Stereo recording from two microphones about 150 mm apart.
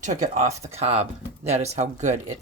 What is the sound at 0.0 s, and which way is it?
Speech, 55° right (ahead or behind).